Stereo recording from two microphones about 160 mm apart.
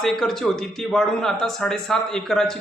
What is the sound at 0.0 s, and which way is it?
A man's voice, centre (ahead or behind).